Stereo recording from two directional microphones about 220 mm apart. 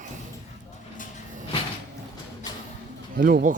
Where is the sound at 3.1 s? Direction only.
40° right (ahead or behind).